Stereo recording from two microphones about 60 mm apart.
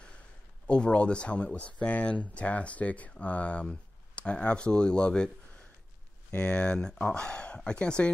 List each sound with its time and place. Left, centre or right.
0.7 s speech: centre
6.3 s speech: centre